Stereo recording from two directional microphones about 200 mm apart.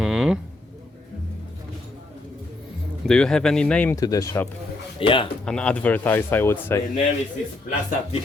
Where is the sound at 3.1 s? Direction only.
5° left (ahead or behind).